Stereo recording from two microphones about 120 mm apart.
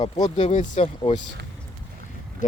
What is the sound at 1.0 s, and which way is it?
Speech, 45° left (ahead or behind).